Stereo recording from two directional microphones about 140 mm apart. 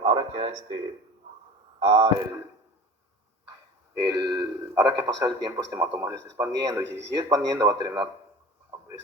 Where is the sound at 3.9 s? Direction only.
25° right (ahead or behind).